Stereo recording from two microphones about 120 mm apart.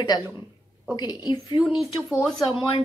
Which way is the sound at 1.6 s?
5° right (ahead or behind).